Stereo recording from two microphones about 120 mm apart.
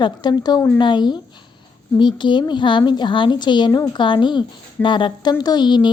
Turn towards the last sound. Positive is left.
turn(degrees=40)  # may be behind; listen again after turning